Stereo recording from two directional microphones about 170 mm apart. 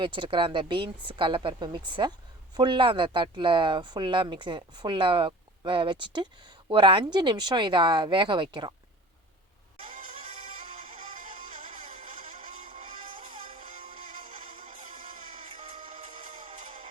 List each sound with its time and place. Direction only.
0.0 s speech: 30° right (ahead or behind)
10.3 s music: 45° right (ahead or behind)